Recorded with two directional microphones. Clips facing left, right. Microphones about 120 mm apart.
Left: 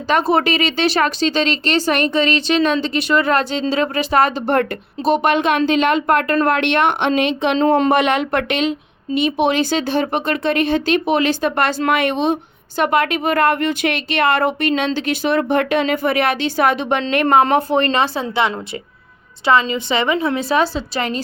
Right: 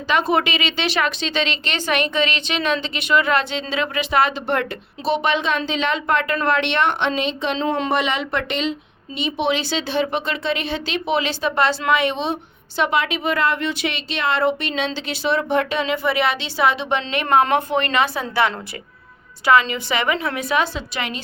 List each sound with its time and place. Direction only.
0.1 s a woman's voice: 40° left (ahead or behind); by 7.6 s 60° left (ahead or behind)
7.6 s speech: 50° left (ahead or behind)
17.4 s a woman's voice: 35° left (ahead or behind)